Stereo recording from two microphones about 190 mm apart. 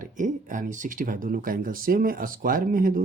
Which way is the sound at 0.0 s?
40° right (ahead or behind).